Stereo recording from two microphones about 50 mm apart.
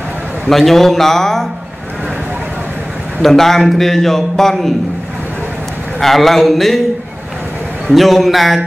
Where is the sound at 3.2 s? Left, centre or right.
Centre.